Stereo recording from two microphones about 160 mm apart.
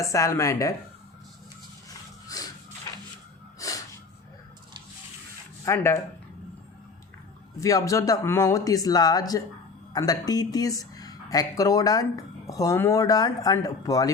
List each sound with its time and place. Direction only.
0.0 s speech: 20° left (ahead or behind)
1.9 s a sound: 20° left (ahead or behind)
3.6 s snort: 20° left (ahead or behind)
5.6 s speech: 20° left (ahead or behind)
7.6 s speech: 20° left (ahead or behind)